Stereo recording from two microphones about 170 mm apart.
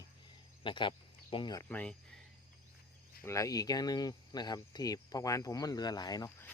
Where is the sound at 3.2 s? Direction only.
15° left (ahead or behind).